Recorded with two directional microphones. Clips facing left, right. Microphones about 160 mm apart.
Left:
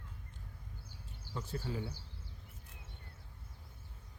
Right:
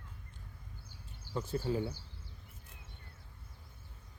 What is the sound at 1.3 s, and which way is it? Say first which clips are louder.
Speech: right 6 dB; 30° right (ahead or behind).